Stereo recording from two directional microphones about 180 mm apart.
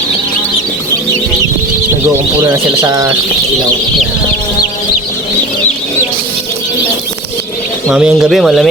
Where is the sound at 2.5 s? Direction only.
20° right (ahead or behind).